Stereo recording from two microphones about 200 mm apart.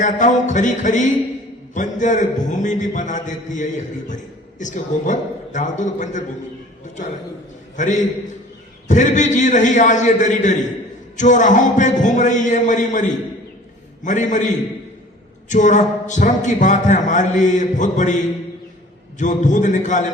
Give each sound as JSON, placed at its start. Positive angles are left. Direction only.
{"t": 0.0, "sound": "a man's voice", "side_deg": 40}
{"t": 8.9, "sound": "a man's voice", "side_deg": 40}
{"t": 19.2, "sound": "a man's voice", "side_deg": 40}